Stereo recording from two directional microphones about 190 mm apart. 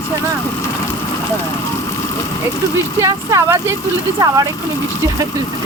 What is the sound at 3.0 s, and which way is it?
Speech, 15° right (ahead or behind).